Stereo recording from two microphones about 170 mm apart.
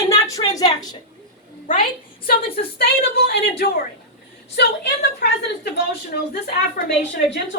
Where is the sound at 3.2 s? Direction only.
70° left (ahead or behind).